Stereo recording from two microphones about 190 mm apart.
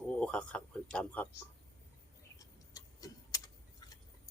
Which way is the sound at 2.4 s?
20° left (ahead or behind).